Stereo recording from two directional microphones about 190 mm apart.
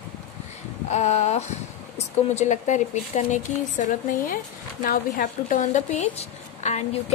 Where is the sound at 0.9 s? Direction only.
35° left (ahead or behind).